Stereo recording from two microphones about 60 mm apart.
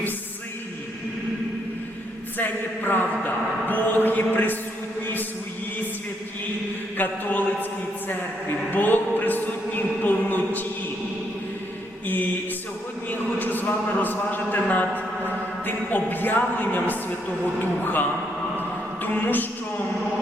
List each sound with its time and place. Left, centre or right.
2.4 s a man's voice: left
6.9 s a man's voice: left
8.7 s a sound: left
12.0 s a man's voice: left
19.0 s a man's voice: left